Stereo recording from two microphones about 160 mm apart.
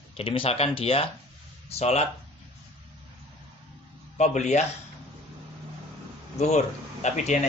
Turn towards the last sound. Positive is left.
turn(degrees=50)  # may be behind; listen again after turning